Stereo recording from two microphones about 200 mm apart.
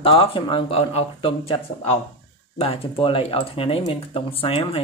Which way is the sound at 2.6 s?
30° left (ahead or behind).